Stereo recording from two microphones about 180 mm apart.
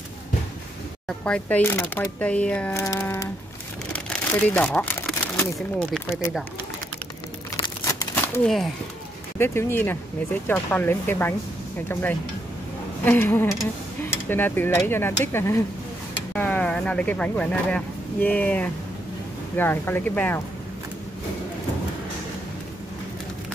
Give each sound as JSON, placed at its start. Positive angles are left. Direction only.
{"t": 1.0, "sound": "speech", "side_deg": 5}
{"t": 7.8, "sound": "crumpling", "side_deg": 20}
{"t": 9.4, "sound": "speech", "side_deg": 15}